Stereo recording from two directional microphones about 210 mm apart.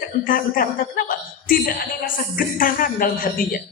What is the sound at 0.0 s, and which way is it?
A woman's voice, 40° left (ahead or behind).